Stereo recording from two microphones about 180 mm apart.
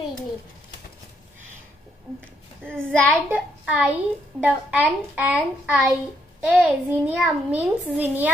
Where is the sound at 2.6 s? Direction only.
10° right (ahead or behind).